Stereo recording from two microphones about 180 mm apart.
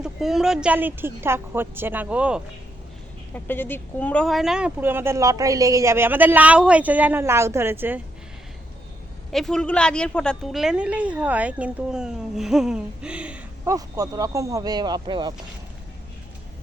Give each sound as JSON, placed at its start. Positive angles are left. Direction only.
{"t": 0.0, "sound": "speech", "side_deg": 0}
{"t": 3.3, "sound": "speech", "side_deg": 10}
{"t": 9.3, "sound": "a woman's voice", "side_deg": 0}
{"t": 13.7, "sound": "speech", "side_deg": -20}